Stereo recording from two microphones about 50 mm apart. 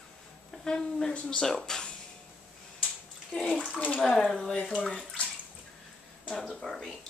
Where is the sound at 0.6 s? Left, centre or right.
Centre.